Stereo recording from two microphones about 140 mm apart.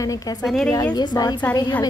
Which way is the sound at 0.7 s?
25° left (ahead or behind).